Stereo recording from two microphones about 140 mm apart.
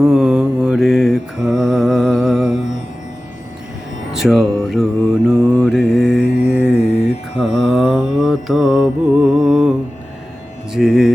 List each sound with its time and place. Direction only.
0.0 s mantra: 5° right (ahead or behind)
4.1 s mantra: 5° right (ahead or behind)
10.7 s speech: 5° right (ahead or behind)